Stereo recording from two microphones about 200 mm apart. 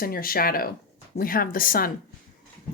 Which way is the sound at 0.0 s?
45° left (ahead or behind).